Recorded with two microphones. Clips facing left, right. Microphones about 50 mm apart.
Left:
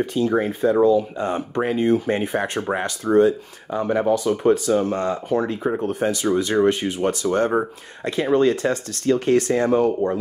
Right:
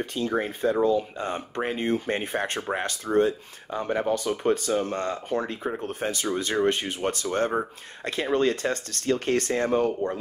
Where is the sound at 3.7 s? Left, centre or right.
Left.